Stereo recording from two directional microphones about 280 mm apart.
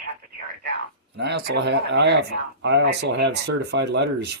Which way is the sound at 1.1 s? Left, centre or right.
Right.